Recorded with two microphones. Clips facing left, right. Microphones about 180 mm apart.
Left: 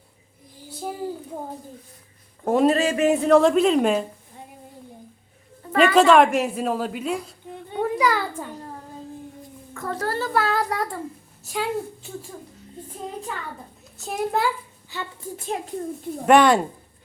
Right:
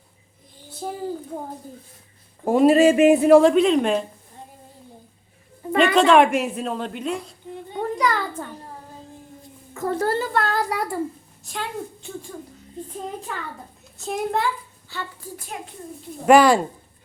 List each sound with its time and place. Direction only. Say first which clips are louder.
0.7 s a sound: even; 10° left (ahead or behind)
2.4 s a woman's voice: right 3 dB; 5° right (ahead or behind)
2.7 s a woman's voice: right 6 dB; 15° right (ahead or behind); by 4.0 s 5° left (ahead or behind)
5.7 s a woman's voice: even; 5° left (ahead or behind)
7.8 s a sound: left 1 dB; 5° left (ahead or behind)
9.7 s a child's voice: right 5 dB; 25° right (ahead or behind)
10.3 s a woman's voice: even; centre (ahead or behind)
11.4 s a woman's voice: left 4 dB; 5° left (ahead or behind)
14.0 s a woman's voice: even; centre (ahead or behind)
14.8 s a child's voice: left 1 dB; 20° left (ahead or behind)
16.2 s a woman's voice: right 2 dB; centre (ahead or behind)